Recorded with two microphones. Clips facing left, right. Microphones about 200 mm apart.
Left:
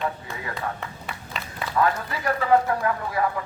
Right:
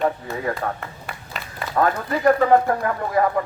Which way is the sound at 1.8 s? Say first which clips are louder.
Right 3 dB; 45° right (ahead or behind).